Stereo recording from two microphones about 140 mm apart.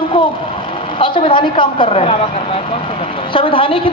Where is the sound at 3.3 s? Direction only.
40° left (ahead or behind).